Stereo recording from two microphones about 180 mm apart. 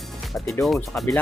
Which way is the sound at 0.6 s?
Centre (ahead or behind).